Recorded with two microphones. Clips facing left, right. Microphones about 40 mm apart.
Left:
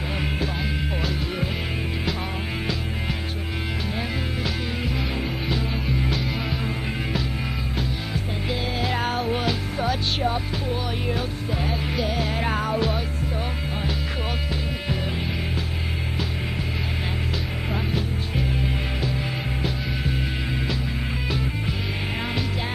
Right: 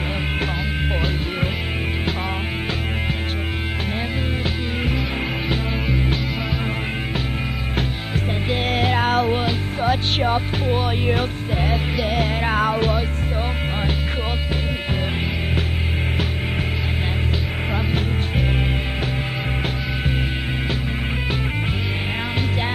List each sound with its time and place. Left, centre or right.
8.6 s music: right
9.3 s music: right